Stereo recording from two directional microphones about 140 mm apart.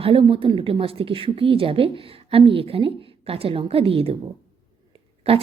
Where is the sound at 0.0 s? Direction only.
40° right (ahead or behind).